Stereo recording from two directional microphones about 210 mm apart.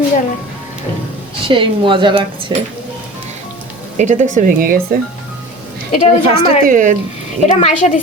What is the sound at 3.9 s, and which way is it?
Speech, 35° right (ahead or behind).